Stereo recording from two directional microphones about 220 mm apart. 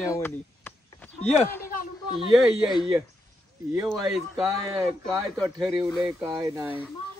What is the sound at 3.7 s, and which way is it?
Speech, centre (ahead or behind).